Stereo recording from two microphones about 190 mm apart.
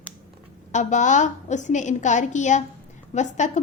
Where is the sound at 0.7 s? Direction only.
40° left (ahead or behind).